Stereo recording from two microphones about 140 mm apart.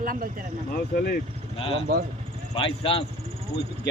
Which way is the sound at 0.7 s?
90° left.